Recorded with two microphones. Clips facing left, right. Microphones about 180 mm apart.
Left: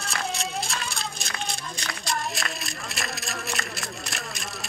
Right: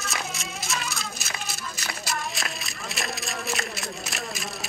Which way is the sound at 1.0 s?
5° right (ahead or behind).